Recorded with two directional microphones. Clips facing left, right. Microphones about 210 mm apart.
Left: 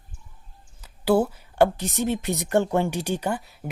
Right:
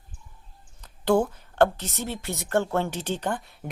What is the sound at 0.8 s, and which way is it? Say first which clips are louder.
Speech: left 1 dB; 5° left (ahead or behind).